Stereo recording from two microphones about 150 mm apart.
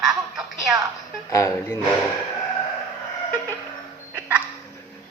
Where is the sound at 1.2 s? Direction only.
20° left (ahead or behind).